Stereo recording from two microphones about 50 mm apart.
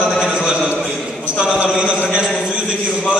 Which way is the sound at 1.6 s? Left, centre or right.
Right.